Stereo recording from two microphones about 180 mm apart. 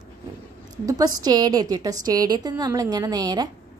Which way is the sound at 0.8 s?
20° right (ahead or behind).